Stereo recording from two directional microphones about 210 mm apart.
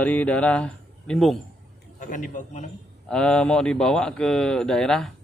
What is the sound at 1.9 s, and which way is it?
Speech, 40° left (ahead or behind).